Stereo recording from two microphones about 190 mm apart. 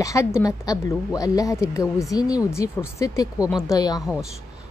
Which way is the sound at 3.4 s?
Centre (ahead or behind).